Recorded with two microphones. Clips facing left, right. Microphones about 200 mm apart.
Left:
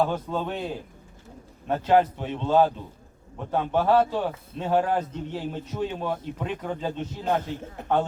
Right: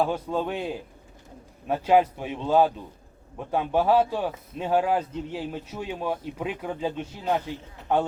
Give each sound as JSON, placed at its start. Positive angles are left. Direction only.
{"t": 0.0, "sound": "a man's voice", "side_deg": -10}
{"t": 1.6, "sound": "a man's voice", "side_deg": -10}
{"t": 7.8, "sound": "a man's voice", "side_deg": 50}